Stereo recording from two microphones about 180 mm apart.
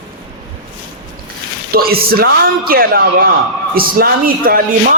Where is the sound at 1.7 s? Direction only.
55° right (ahead or behind).